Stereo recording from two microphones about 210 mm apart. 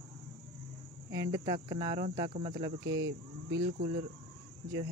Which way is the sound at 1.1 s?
15° right (ahead or behind).